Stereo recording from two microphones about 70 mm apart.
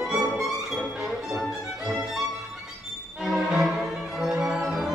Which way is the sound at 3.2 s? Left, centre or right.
Centre.